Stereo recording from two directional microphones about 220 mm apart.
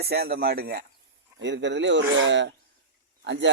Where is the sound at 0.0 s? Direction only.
45° right (ahead or behind).